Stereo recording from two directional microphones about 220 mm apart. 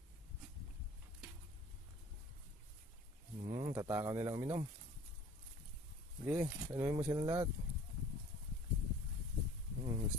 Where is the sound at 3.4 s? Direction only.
25° right (ahead or behind).